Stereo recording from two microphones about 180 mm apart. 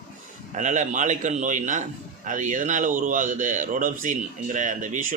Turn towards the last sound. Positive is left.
turn(degrees=-45)  # may be behind; listen again after turning